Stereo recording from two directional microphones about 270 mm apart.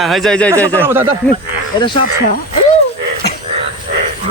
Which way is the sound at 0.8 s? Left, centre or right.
Centre.